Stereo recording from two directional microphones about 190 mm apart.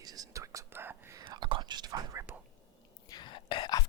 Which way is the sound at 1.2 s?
25° right (ahead or behind).